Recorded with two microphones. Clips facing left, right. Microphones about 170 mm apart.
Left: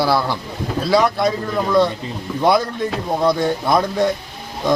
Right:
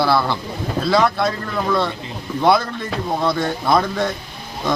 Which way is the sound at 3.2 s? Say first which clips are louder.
Left 5 dB; 15° left (ahead or behind).